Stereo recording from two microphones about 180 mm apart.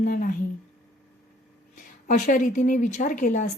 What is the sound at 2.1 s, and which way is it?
A woman's voice, 45° left (ahead or behind).